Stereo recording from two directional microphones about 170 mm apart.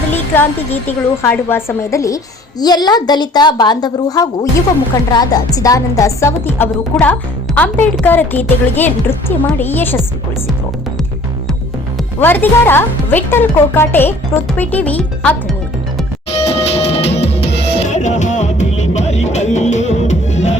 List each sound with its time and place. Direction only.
0.3 s a woman's voice: 10° left (ahead or behind)
12.2 s speech: 10° left (ahead or behind)
16.3 s music: 35° left (ahead or behind)